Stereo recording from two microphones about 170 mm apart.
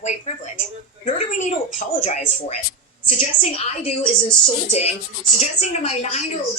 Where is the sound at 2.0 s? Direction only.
45° left (ahead or behind).